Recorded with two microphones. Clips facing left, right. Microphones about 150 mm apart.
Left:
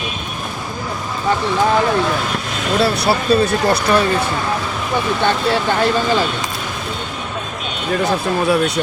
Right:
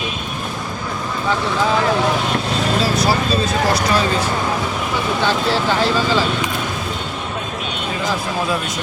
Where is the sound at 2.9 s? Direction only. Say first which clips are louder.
Left 2 dB; 65° left (ahead or behind).